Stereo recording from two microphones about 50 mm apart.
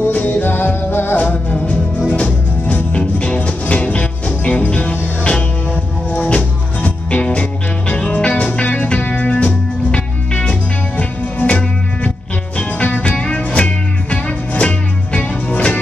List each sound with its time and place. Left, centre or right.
0.1 s music: left
1.1 s music: left